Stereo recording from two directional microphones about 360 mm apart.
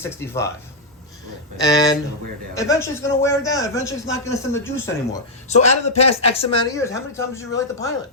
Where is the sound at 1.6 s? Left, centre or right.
Centre.